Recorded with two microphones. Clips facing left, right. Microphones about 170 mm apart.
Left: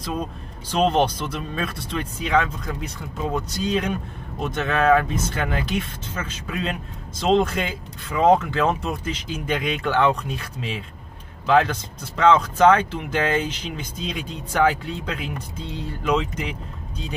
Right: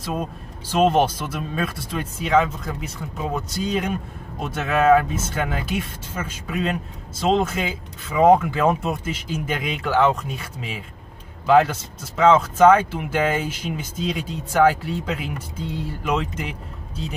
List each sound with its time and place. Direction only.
0.0 s speech: 5° right (ahead or behind)